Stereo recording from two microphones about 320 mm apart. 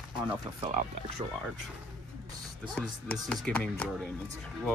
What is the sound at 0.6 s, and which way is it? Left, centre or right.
Speech, centre.